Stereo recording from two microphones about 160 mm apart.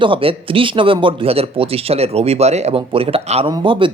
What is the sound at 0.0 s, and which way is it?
Speech, 35° right (ahead or behind).